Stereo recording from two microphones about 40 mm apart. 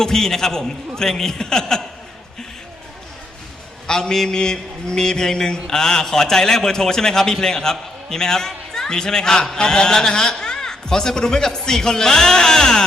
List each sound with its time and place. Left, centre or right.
0.0 s a man's voice: centre
3.8 s a man's voice: centre